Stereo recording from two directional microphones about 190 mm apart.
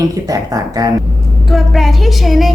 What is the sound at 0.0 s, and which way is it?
Speech, 20° right (ahead or behind).